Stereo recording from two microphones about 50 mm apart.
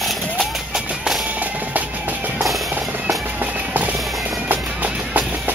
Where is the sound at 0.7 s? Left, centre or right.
Centre.